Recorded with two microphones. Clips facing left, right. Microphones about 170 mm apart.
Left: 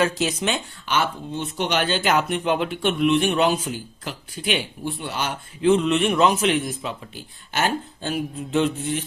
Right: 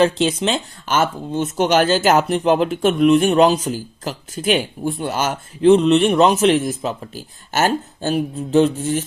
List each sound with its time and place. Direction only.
0.0 s speech: 30° right (ahead or behind)
0.9 s speech: 45° right (ahead or behind)